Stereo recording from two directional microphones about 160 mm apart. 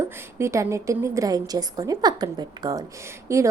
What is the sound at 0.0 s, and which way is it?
A woman's voice, 15° right (ahead or behind).